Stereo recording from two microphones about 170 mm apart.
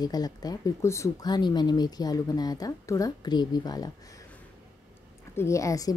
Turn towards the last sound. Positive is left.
turn(degrees=20)  # may be behind; listen again after turning